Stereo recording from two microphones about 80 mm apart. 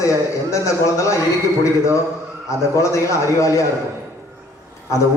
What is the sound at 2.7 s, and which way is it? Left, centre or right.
Speech, left.